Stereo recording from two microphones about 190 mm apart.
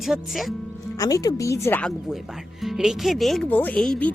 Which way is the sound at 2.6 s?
Centre (ahead or behind).